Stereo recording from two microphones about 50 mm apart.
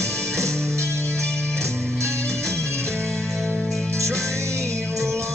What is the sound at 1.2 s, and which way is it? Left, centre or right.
Music, centre.